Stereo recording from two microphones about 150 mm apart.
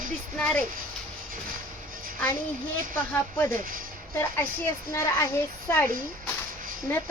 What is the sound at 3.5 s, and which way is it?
Speech, 70° right (ahead or behind).